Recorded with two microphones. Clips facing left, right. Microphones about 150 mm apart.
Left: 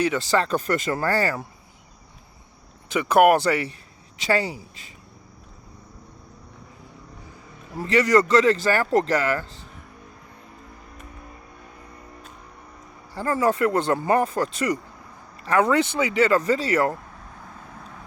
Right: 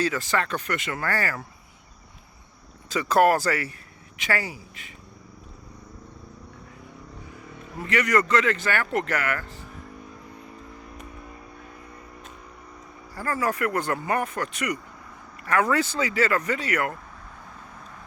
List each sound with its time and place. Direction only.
0.3 s speech: 35° left (ahead or behind)
2.9 s speech: 15° left (ahead or behind)
7.8 s speech: 30° left (ahead or behind)
13.1 s speech: 25° left (ahead or behind)